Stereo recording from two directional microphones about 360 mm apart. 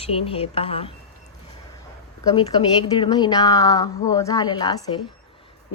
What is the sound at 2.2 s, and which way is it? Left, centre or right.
A woman's voice, centre.